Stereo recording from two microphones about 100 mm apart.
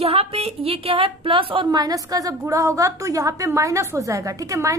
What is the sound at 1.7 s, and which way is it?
A woman's voice, 40° right (ahead or behind).